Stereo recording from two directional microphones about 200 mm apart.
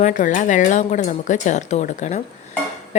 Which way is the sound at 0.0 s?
40° left (ahead or behind).